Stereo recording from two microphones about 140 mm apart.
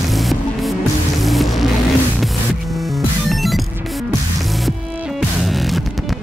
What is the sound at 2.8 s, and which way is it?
Music, centre (ahead or behind).